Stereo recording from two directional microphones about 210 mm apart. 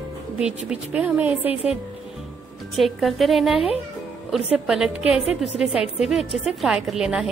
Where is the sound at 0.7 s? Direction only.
5° right (ahead or behind).